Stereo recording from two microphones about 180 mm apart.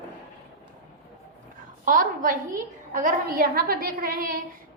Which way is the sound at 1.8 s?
50° right (ahead or behind).